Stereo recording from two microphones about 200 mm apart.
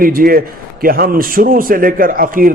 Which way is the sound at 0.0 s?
45° right (ahead or behind).